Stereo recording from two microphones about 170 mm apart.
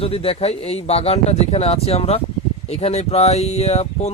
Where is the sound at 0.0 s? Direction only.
35° left (ahead or behind).